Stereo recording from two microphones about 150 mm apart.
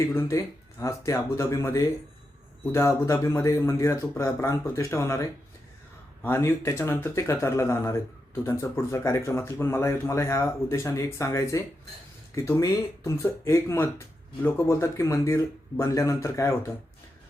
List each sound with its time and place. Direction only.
0.1 s speech: 15° left (ahead or behind)
6.2 s speech: 15° left (ahead or behind)